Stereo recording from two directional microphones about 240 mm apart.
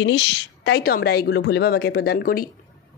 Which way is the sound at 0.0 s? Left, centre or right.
Left.